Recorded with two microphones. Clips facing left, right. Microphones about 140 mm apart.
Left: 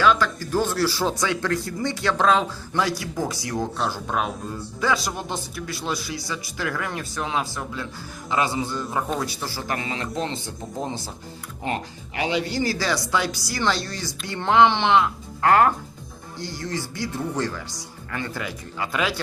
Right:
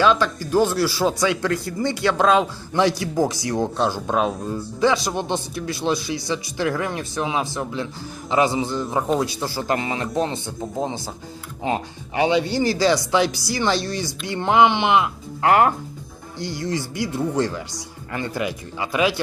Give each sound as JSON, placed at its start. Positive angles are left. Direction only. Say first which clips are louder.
{"t": 0.0, "sound": "speech", "louder": "right 2 dB", "side_deg": -20}
{"t": 12.2, "sound": "speech", "louder": "right 5 dB", "side_deg": -25}